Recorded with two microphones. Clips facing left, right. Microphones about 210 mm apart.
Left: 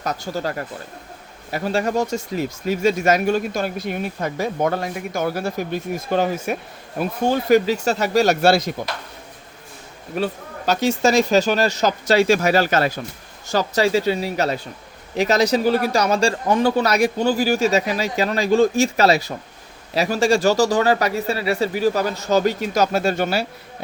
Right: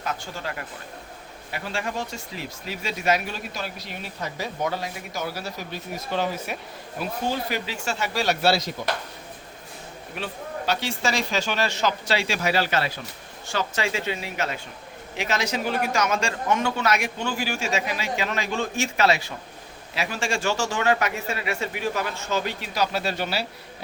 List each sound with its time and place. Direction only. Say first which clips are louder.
0.0 s a man's voice: left 7 dB; 40° left (ahead or behind)
10.1 s a man's voice: left 8 dB; 40° left (ahead or behind)